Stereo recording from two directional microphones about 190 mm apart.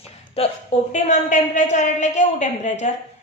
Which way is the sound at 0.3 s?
35° left (ahead or behind).